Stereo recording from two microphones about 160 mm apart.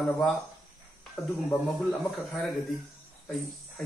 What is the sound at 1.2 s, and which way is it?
Speech, centre (ahead or behind).